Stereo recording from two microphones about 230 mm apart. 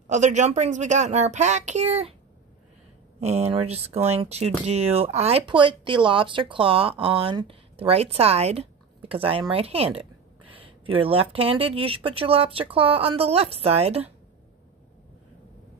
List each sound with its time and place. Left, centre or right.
0.1 s a woman's voice: right
3.2 s speech: right